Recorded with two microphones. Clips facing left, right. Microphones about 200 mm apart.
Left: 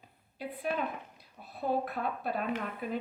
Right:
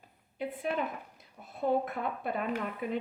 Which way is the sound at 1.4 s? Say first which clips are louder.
Right 2 dB; 20° right (ahead or behind).